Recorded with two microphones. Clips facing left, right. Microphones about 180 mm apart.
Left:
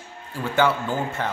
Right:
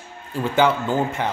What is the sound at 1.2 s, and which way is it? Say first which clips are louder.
Speech: right 3 dB; 15° right (ahead or behind).